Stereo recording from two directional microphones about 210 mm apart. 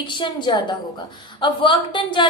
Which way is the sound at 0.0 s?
20° left (ahead or behind).